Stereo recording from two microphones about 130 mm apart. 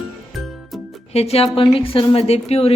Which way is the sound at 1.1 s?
50° left (ahead or behind).